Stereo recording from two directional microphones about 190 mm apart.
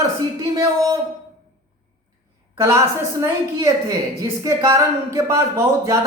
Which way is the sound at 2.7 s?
15° right (ahead or behind).